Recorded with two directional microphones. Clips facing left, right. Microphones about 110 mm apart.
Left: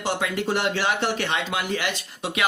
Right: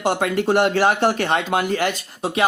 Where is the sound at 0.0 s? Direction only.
55° right (ahead or behind).